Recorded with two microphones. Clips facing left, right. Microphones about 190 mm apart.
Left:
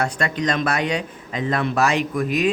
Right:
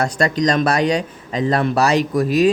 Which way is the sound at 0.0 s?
40° right (ahead or behind).